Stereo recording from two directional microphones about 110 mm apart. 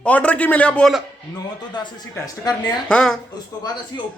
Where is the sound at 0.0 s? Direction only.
10° left (ahead or behind).